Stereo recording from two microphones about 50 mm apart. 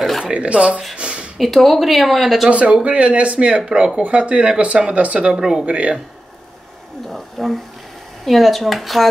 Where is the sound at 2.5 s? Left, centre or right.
Right.